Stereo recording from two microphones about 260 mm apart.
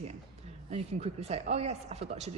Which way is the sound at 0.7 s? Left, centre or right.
Right.